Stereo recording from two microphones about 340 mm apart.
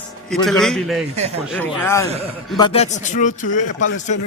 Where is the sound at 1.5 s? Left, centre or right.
Centre.